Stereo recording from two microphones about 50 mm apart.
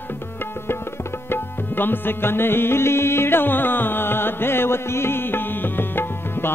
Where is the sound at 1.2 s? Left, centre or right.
Left.